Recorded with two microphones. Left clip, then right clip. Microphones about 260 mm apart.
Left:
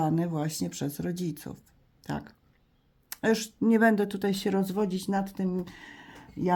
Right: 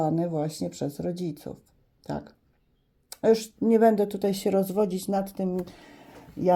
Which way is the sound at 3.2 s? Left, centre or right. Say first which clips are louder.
Right 5 dB; centre.